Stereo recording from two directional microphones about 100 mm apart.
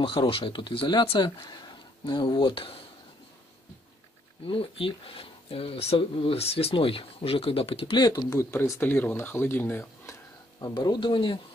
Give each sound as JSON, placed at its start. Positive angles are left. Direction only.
{"t": 0.0, "sound": "speech", "side_deg": 60}
{"t": 4.5, "sound": "speech", "side_deg": 65}
{"t": 8.0, "sound": "speech", "side_deg": 40}
{"t": 8.5, "sound": "speech", "side_deg": 25}
{"t": 10.7, "sound": "speech", "side_deg": 50}